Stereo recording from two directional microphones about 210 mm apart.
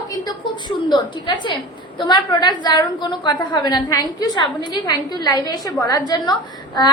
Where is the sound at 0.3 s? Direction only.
20° left (ahead or behind).